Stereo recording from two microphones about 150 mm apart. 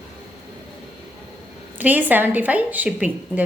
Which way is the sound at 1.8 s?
10° right (ahead or behind).